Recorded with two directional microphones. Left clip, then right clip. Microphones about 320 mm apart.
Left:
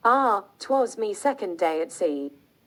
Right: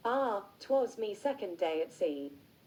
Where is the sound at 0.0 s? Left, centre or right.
Left.